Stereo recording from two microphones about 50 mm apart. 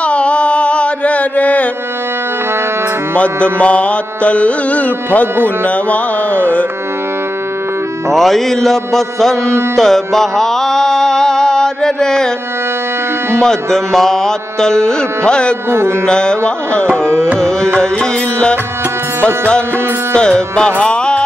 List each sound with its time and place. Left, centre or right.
0.0 s mantra: left
3.2 s music: left
5.6 s carnatic music: left
8.1 s mantra: centre
9.8 s music: centre
13.3 s mantra: centre
15.7 s music: right
16.1 s mantra: centre
16.9 s music: centre
17.4 s mantra: centre
17.7 s music: centre
20.2 s mantra: centre
20.8 s music: centre